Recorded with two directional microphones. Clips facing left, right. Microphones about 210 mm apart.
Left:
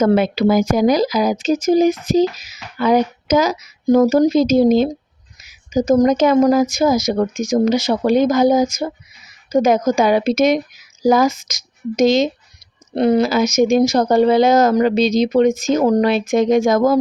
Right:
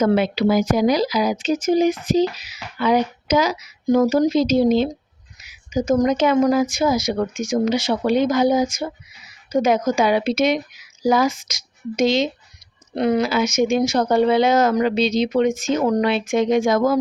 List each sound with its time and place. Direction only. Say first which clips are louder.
0.0 s speech: left 3 dB; 45° left (ahead or behind)
12.9 s speech: left 4 dB; 35° left (ahead or behind)